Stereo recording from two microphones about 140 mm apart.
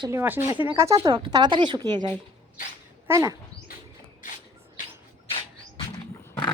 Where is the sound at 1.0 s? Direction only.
35° right (ahead or behind).